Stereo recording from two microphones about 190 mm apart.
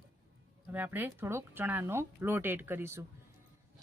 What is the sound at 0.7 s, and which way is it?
Speech, 10° right (ahead or behind).